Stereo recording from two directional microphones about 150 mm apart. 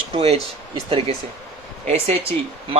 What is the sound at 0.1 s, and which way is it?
A man's voice, 45° right (ahead or behind).